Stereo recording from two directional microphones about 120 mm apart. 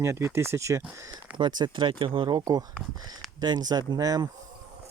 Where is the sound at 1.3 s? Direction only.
40° right (ahead or behind).